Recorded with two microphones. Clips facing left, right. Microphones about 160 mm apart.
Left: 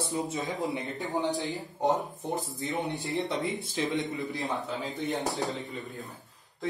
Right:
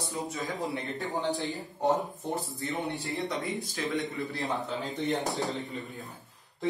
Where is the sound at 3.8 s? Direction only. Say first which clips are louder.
Left 2 dB; 20° left (ahead or behind).